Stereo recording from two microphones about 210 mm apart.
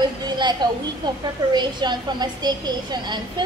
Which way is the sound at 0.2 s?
20° right (ahead or behind).